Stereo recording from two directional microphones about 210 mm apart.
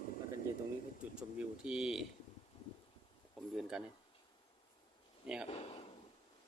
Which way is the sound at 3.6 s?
5° right (ahead or behind).